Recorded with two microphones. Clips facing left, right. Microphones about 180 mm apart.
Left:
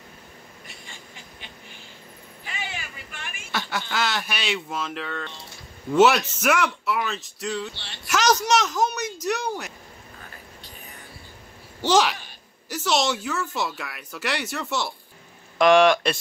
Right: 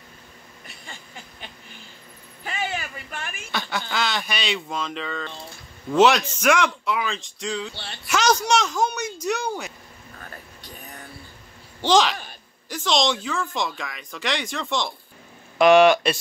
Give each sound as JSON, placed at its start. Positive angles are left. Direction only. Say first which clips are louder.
{"t": 2.4, "sound": "vehicle", "louder": "right 7 dB", "side_deg": -50}
{"t": 3.5, "sound": "speech", "louder": "even", "side_deg": 5}
{"t": 11.8, "sound": "speech", "louder": "right 1 dB", "side_deg": 5}
{"t": 15.5, "sound": "speech", "louder": "right 2 dB", "side_deg": -5}